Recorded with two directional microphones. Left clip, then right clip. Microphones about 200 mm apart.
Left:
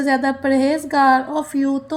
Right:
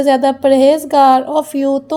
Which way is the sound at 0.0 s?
35° right (ahead or behind).